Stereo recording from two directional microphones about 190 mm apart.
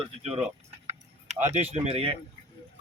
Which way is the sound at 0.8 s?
35° right (ahead or behind).